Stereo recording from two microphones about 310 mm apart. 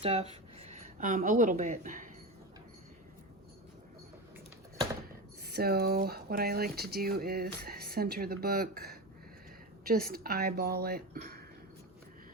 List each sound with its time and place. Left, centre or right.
0.0 s speech: centre
5.5 s speech: right